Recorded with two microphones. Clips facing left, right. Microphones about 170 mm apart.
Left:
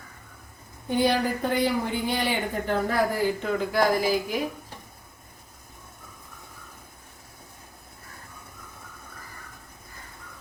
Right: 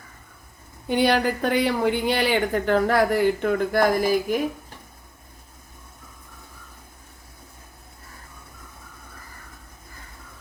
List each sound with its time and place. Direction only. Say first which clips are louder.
0.9 s speech: right 3 dB; 75° right (ahead or behind); by 4.4 s 50° right (ahead or behind)